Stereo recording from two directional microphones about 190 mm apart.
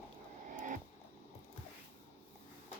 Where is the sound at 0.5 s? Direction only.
40° right (ahead or behind).